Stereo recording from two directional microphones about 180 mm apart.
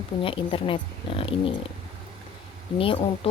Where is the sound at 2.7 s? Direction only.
30° left (ahead or behind).